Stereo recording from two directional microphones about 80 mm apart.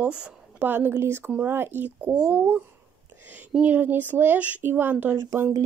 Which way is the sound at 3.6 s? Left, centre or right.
Right.